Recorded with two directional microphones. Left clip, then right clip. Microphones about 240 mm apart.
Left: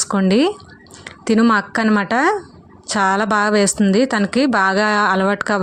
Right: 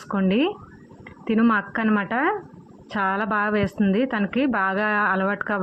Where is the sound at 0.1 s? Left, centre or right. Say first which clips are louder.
Left 5 dB; left.